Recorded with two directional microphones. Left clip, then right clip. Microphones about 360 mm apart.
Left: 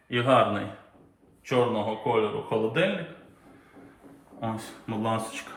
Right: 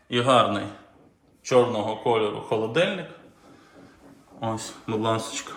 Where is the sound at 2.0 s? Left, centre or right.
Centre.